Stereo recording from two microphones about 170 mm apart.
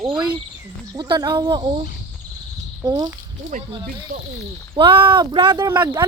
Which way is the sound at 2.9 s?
25° right (ahead or behind).